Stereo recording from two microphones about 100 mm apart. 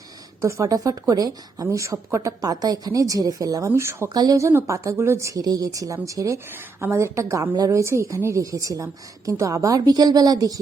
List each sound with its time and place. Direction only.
0.4 s speech: 30° right (ahead or behind)
4.1 s speech: 40° right (ahead or behind)